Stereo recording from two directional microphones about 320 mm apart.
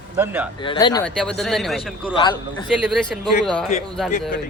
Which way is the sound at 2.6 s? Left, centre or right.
Centre.